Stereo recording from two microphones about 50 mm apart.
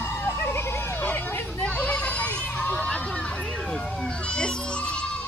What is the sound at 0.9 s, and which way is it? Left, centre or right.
Hubbub, left.